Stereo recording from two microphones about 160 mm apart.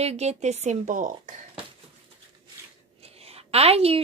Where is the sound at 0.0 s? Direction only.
40° right (ahead or behind).